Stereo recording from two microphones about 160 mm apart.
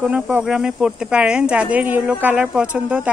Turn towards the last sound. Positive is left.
turn(degrees=-10)  # may be behind; listen again after turning